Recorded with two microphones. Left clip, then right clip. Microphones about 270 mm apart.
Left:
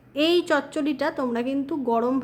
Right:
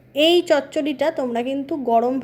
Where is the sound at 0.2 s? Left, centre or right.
Centre.